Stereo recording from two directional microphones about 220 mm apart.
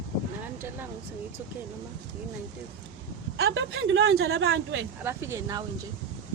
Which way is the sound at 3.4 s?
55° right (ahead or behind).